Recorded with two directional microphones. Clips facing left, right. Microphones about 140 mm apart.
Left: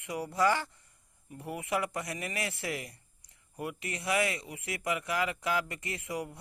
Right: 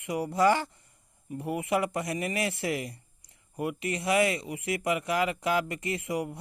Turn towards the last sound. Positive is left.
turn(degrees=-20)  # may be behind; listen again after turning